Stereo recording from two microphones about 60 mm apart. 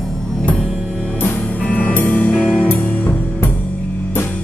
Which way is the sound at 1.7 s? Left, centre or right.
Left.